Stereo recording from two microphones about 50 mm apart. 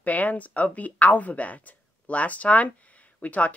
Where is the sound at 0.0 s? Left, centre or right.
Left.